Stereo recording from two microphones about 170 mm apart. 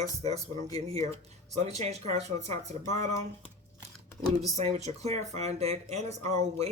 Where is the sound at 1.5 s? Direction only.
40° right (ahead or behind).